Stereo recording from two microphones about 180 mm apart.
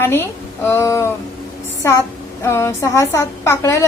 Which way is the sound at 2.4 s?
15° left (ahead or behind).